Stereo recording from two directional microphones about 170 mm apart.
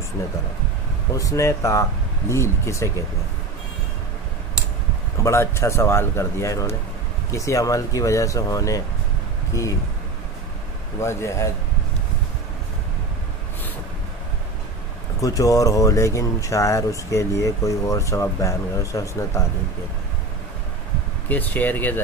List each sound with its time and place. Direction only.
1.1 s speech: 20° left (ahead or behind)
5.2 s speech: 15° left (ahead or behind)
11.0 s speech: 15° left (ahead or behind)
15.1 s speech: 20° left (ahead or behind)
21.3 s speech: 10° left (ahead or behind)